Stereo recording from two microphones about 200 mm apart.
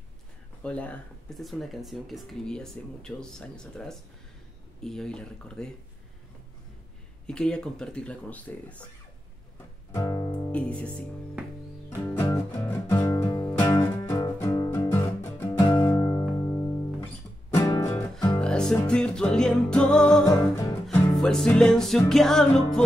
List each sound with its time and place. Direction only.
0.6 s speech: 5° left (ahead or behind)
7.2 s speech: 5° left (ahead or behind)
9.9 s music: 20° left (ahead or behind)
10.3 s music: 5° left (ahead or behind)
18.4 s music: 5° left (ahead or behind)
20.2 s music: 15° left (ahead or behind)
21.2 s speech: 5° left (ahead or behind)